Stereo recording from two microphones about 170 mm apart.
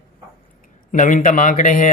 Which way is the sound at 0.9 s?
50° left (ahead or behind).